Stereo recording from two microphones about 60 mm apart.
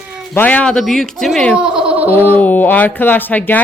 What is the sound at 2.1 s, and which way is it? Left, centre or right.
Speech, left.